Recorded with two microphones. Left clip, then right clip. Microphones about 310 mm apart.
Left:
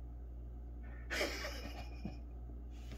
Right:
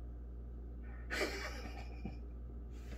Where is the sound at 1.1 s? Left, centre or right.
Centre.